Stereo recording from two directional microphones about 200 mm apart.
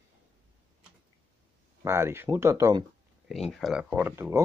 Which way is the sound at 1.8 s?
10° right (ahead or behind).